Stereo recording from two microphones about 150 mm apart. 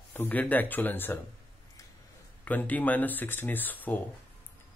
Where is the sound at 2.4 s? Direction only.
10° left (ahead or behind).